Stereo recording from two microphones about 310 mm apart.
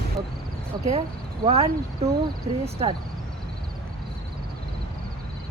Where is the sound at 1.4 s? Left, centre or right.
Centre.